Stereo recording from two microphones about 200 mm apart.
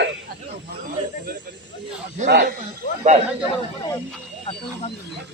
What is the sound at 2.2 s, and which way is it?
Speech, 35° right (ahead or behind).